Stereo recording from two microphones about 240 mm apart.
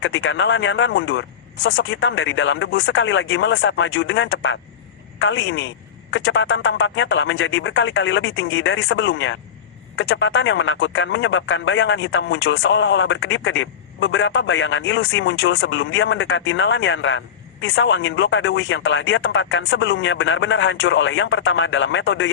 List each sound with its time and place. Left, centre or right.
0.0 s speech: left